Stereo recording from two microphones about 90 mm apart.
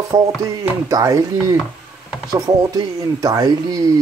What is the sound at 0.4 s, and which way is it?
Speech, 40° right (ahead or behind).